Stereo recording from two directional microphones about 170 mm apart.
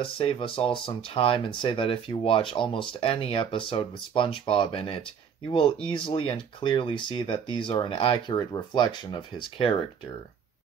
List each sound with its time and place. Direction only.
0.0 s speech: 35° left (ahead or behind)